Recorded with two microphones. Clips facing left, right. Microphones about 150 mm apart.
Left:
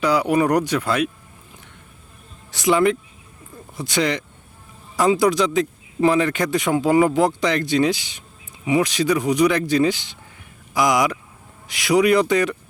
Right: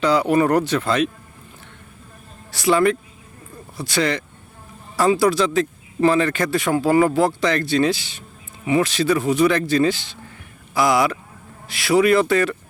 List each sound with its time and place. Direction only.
0.0 s speech: 10° left (ahead or behind)
2.5 s speech: 20° left (ahead or behind)